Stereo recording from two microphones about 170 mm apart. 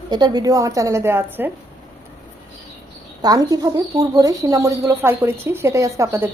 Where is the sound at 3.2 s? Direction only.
20° right (ahead or behind).